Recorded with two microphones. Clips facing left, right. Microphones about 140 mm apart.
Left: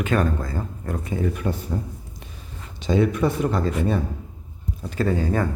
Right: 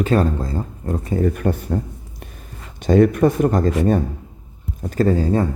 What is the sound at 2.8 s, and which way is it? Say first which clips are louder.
Speech: right 6 dB; 50° right (ahead or behind).